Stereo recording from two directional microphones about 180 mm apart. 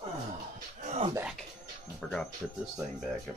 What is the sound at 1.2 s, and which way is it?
Speech, 5° right (ahead or behind).